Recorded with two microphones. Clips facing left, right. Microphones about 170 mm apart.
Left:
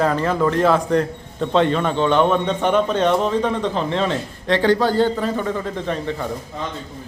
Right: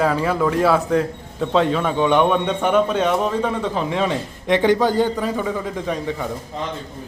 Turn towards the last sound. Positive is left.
turn(degrees=-10)  # may be behind; listen again after turning